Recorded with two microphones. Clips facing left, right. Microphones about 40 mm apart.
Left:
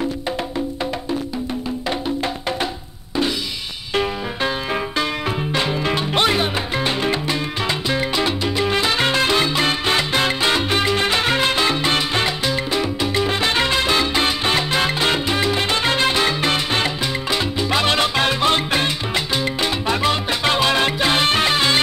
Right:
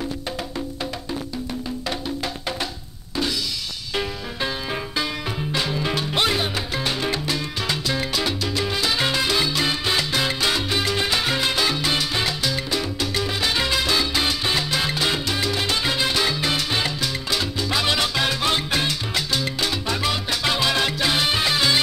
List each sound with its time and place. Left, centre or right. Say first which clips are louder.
3.9 s music: left 6 dB; left